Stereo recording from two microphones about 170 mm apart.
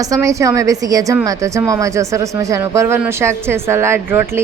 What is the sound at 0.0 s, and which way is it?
A woman's voice, 20° right (ahead or behind).